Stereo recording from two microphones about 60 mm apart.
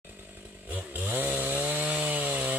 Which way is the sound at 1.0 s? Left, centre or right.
Right.